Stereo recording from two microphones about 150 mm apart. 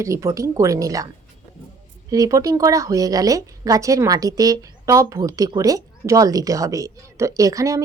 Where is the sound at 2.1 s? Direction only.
20° right (ahead or behind).